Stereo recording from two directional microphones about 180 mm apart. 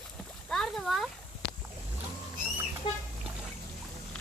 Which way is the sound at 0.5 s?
5° left (ahead or behind).